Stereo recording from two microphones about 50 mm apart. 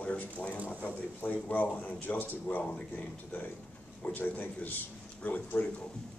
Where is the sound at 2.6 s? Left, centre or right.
Left.